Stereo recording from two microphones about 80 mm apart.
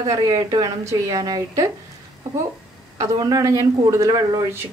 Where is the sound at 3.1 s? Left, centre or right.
Right.